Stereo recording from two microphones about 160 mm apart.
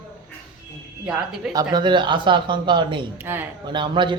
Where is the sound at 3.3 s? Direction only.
15° right (ahead or behind).